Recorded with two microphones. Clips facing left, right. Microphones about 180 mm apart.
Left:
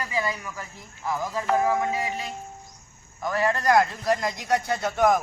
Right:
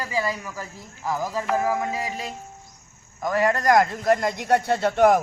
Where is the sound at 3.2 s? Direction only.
45° right (ahead or behind).